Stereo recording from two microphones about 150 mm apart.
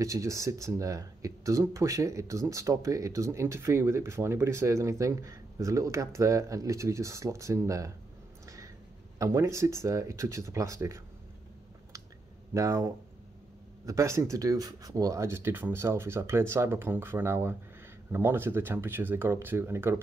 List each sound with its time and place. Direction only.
0.0 s speech: 20° right (ahead or behind)
9.2 s speech: 20° right (ahead or behind)
12.5 s speech: 20° right (ahead or behind)